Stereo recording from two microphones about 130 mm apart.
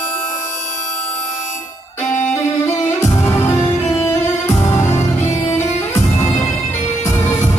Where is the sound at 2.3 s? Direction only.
25° left (ahead or behind).